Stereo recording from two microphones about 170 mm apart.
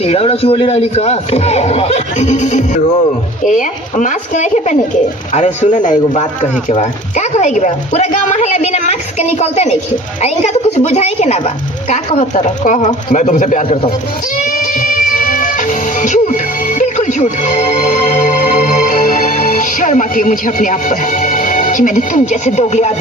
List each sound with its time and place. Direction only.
0.0 s a man's voice: 35° left (ahead or behind)
14.3 s music: 50° left (ahead or behind)